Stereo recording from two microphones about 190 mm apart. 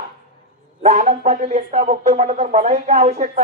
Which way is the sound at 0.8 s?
35° right (ahead or behind).